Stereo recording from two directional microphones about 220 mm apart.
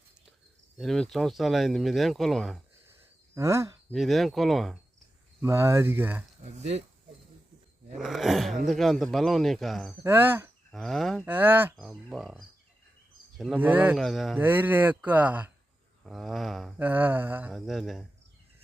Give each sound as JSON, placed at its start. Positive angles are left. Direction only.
{"t": 0.8, "sound": "speech", "side_deg": 0}
{"t": 3.3, "sound": "speech", "side_deg": -15}
{"t": 3.9, "sound": "speech", "side_deg": 0}
{"t": 5.4, "sound": "speech", "side_deg": -10}
{"t": 6.4, "sound": "speech", "side_deg": -30}
{"t": 7.9, "sound": "speech", "side_deg": 0}
{"t": 10.7, "sound": "speech", "side_deg": 0}